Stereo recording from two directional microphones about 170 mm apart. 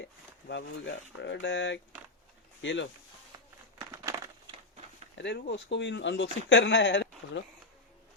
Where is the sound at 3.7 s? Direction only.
20° right (ahead or behind).